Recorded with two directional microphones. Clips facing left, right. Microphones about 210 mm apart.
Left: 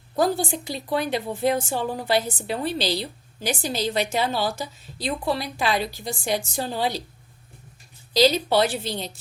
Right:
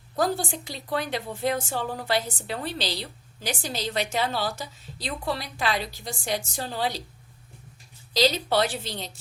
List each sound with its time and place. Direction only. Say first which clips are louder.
0.2 s a woman's voice: left 4 dB; 5° left (ahead or behind)
4.4 s speech: left 3 dB; 30° left (ahead or behind)
4.9 s a woman's voice: left 5 dB; 10° left (ahead or behind)
8.1 s a woman's voice: left 4 dB; 5° left (ahead or behind)